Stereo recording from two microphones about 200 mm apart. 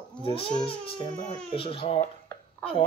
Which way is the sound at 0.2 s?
30° left (ahead or behind).